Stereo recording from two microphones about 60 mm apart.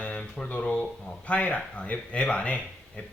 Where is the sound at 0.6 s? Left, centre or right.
Centre.